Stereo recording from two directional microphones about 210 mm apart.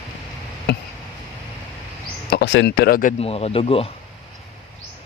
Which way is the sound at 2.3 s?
55° left (ahead or behind).